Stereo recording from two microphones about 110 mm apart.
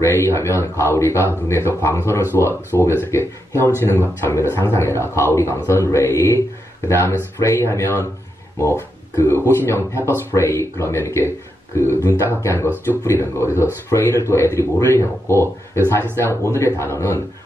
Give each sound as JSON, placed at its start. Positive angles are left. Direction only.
{"t": 0.0, "sound": "a man's voice", "side_deg": 25}